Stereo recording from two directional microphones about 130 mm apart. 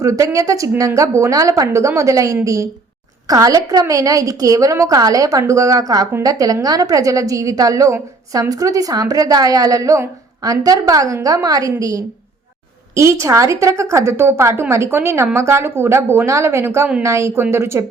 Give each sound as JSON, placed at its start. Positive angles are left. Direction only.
{"t": 0.0, "sound": "a woman's voice", "side_deg": -25}